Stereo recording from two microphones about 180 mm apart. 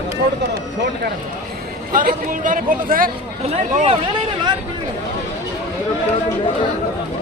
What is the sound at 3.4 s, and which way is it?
Speech, 40° right (ahead or behind).